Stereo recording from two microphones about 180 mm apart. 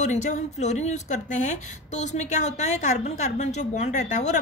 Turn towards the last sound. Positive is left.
turn(degrees=40)  # may be behind; listen again after turning